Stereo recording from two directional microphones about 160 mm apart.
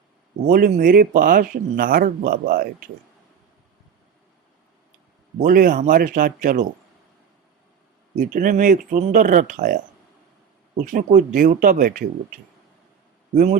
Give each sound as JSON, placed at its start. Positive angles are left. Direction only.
{"t": 0.4, "sound": "speech", "side_deg": -60}
{"t": 5.4, "sound": "speech", "side_deg": -60}
{"t": 8.1, "sound": "speech", "side_deg": -55}
{"t": 10.9, "sound": "speech", "side_deg": -55}
{"t": 13.3, "sound": "a man's voice", "side_deg": -50}